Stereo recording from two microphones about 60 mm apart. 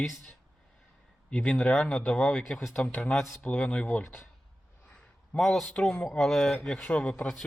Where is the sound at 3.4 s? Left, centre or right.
Left.